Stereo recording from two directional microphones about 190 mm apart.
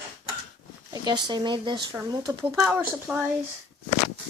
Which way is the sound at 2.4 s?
Centre (ahead or behind).